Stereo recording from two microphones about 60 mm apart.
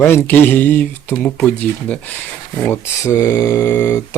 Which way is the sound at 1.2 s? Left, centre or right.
Centre.